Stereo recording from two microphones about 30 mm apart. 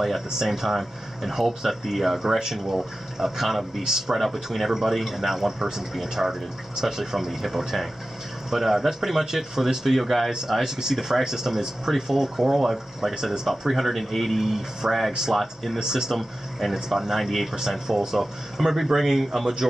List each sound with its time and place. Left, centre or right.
0.4 s speech: centre
10.0 s speech: centre
10.6 s speech: centre
14.4 s speech: centre
15.8 s speech: centre
16.2 s speech: centre
17.6 s speech: centre